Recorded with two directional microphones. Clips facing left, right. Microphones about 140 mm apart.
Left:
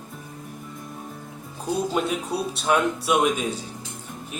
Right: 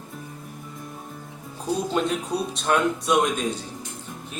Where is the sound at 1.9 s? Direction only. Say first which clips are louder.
Right 1 dB; 5° left (ahead or behind).